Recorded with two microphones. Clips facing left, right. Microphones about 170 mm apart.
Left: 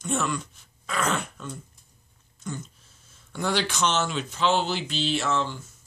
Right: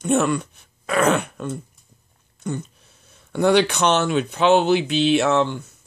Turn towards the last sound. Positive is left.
turn(degrees=-65)  # may be behind; listen again after turning